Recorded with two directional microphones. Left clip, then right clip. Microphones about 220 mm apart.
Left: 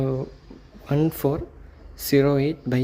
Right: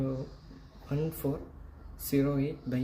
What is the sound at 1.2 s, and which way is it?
Speech, 45° left (ahead or behind).